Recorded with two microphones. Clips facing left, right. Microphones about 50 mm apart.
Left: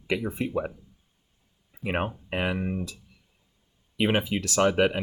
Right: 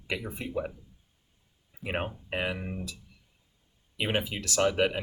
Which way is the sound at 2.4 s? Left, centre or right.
Left.